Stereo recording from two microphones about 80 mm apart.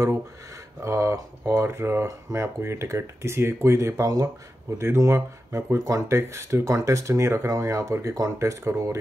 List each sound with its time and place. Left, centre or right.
0.8 s speech: right